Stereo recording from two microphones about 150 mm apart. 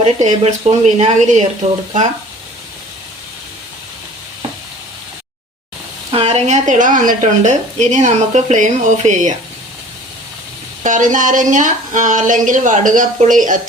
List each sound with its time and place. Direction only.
0.0 s a woman's voice: 50° right (ahead or behind)
6.1 s a woman's voice: 40° right (ahead or behind)
10.8 s a woman's voice: 60° right (ahead or behind)